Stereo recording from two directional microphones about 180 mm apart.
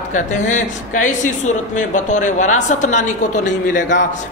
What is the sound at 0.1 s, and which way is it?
A woman's voice, 45° left (ahead or behind).